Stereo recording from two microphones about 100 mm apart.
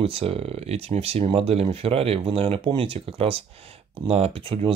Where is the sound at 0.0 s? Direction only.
70° right (ahead or behind).